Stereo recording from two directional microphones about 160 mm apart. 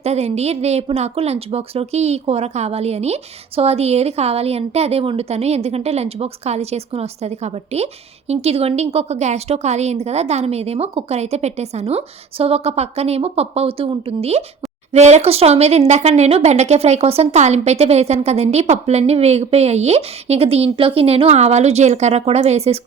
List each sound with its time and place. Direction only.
0.0 s a woman's voice: 40° right (ahead or behind)